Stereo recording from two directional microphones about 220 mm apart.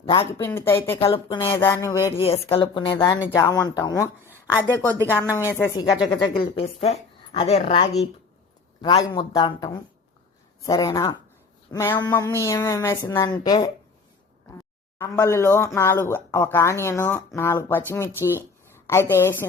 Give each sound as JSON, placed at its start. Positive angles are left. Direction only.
{"t": 0.0, "sound": "speech", "side_deg": 25}
{"t": 0.3, "sound": "speech", "side_deg": 10}
{"t": 0.9, "sound": "speech", "side_deg": 25}
{"t": 1.5, "sound": "speech", "side_deg": 15}
{"t": 14.9, "sound": "speech", "side_deg": 10}